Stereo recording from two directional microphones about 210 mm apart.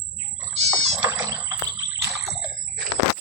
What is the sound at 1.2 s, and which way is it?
Water, 15° right (ahead or behind).